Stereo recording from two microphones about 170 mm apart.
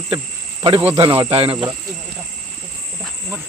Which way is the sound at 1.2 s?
35° right (ahead or behind).